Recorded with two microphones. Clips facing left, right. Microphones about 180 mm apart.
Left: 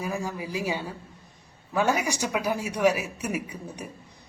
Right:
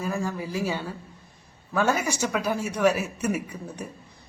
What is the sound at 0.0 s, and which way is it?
A woman's voice, 15° left (ahead or behind).